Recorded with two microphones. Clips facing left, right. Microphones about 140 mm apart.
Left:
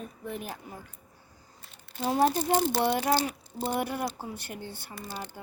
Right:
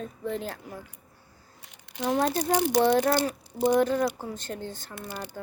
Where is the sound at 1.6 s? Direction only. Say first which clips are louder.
Right 2 dB; 85° right.